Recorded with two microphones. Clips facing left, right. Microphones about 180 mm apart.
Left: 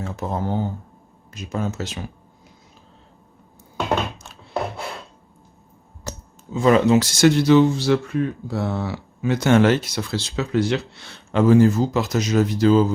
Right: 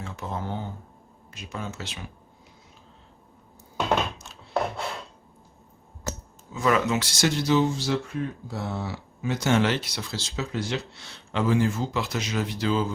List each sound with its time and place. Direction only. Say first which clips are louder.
0.0 s speech: left 7 dB; 40° left (ahead or behind)
6.1 s a sound: left 2 dB; 30° left (ahead or behind)
7.1 s speech: left 7 dB; 60° left (ahead or behind); by 12.9 s 40° left (ahead or behind)